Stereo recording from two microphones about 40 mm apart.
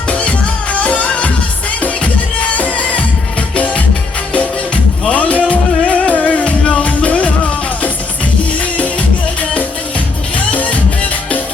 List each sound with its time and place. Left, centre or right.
0.1 s music: left
2.6 s music: left
5.1 s music: left
8.8 s music: left